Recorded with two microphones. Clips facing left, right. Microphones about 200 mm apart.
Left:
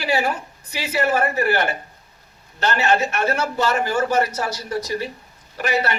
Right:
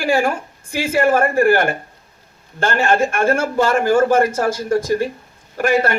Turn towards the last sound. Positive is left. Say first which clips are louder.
# right 6 dB
turn(degrees=-50)  # may be behind; listen again after turning